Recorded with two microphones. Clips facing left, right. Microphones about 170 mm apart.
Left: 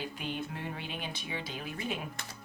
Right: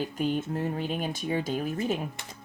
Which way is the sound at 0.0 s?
45° right (ahead or behind).